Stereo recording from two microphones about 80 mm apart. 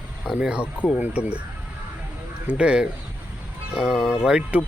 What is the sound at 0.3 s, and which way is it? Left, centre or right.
Speech, centre.